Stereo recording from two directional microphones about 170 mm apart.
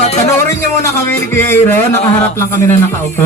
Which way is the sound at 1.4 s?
10° left (ahead or behind).